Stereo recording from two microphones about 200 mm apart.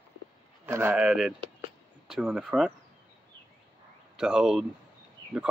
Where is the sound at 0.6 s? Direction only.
10° right (ahead or behind).